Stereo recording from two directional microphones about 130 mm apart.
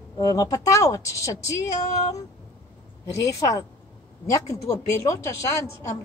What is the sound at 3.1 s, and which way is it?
A woman's voice, 25° left (ahead or behind).